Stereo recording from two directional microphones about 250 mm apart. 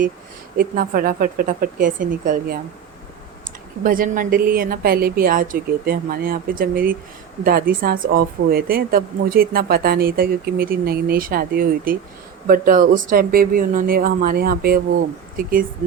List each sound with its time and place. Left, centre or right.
0.5 s speech: right
3.8 s speech: right